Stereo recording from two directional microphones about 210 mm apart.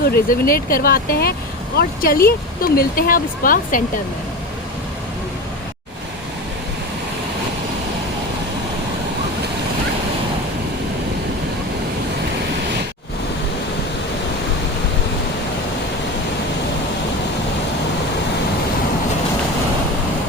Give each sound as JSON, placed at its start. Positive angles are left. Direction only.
{"t": 0.0, "sound": "speech", "side_deg": 45}